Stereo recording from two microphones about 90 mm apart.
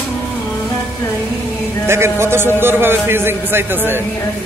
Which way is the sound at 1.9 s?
30° right (ahead or behind).